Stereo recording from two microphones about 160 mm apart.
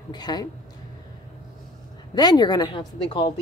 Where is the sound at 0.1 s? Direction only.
25° left (ahead or behind).